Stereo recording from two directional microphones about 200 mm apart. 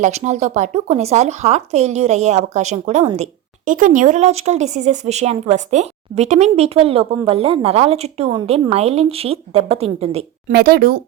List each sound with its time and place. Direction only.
0.0 s speech: 35° right (ahead or behind)
10.5 s speech: 50° right (ahead or behind)